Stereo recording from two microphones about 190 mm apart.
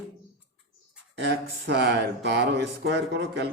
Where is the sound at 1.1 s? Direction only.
65° right (ahead or behind).